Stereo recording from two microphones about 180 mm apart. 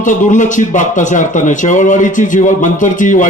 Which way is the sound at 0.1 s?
45° left (ahead or behind).